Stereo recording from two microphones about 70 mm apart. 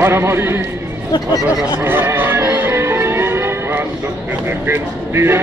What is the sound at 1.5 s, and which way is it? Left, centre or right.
Music, right.